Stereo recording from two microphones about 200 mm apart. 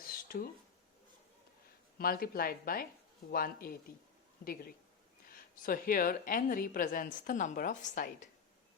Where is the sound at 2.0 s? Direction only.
50° left (ahead or behind).